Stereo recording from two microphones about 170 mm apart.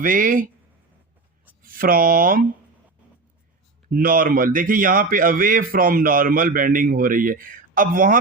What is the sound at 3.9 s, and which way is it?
Speech, 55° right (ahead or behind).